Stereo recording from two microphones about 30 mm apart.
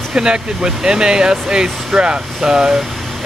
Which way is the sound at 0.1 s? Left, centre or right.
Right.